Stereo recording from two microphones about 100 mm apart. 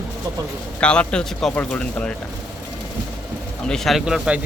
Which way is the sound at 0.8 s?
10° left (ahead or behind).